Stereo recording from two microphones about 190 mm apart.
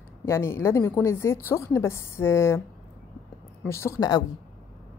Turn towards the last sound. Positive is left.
turn(degrees=20)  # may be behind; listen again after turning